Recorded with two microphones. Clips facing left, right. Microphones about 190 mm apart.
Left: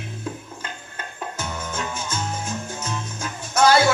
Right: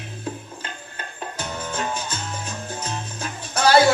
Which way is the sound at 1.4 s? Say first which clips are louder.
Right 2 dB; 35° right (ahead or behind).